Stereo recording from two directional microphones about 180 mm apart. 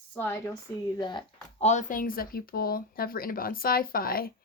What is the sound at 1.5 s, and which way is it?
Speech, 40° left (ahead or behind).